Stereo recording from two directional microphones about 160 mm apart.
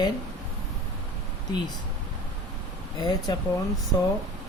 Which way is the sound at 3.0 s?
25° left (ahead or behind).